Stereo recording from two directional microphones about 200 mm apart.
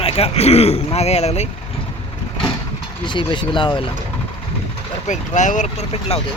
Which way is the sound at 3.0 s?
25° left (ahead or behind).